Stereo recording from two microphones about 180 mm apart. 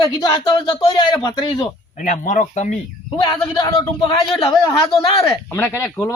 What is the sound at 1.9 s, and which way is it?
Speech, 45° left (ahead or behind).